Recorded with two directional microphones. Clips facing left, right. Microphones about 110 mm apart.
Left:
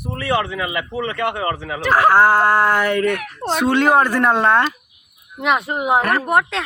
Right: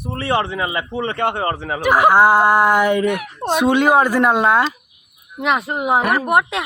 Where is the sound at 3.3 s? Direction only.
15° right (ahead or behind).